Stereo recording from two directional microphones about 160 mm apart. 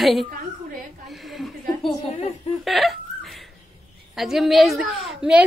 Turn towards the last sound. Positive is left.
turn(degrees=-5)  # may be behind; listen again after turning